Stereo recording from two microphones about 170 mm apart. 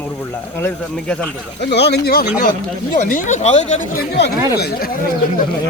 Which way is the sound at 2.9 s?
50° left (ahead or behind).